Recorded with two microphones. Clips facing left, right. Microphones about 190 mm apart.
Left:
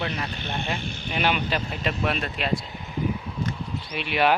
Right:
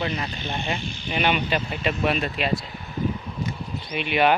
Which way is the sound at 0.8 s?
55° left (ahead or behind).